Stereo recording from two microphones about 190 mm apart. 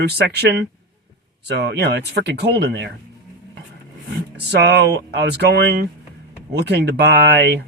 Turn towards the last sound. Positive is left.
turn(degrees=-60)  # may be behind; listen again after turning